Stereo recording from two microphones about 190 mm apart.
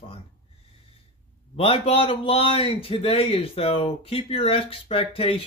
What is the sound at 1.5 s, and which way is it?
A man's voice, 30° left (ahead or behind).